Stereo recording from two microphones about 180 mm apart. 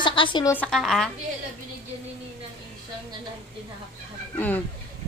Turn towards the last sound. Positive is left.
turn(degrees=10)  # may be behind; listen again after turning